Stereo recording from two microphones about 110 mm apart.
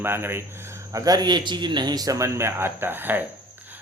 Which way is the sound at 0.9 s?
35° right (ahead or behind).